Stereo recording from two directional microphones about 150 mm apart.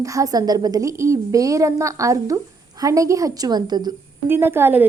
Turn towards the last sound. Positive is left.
turn(degrees=-15)  # may be behind; listen again after turning